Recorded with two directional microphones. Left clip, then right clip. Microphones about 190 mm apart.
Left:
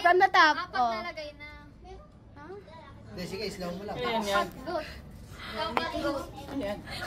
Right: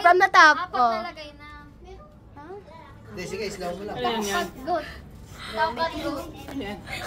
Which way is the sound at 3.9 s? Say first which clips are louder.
Right 3 dB; 35° right (ahead or behind).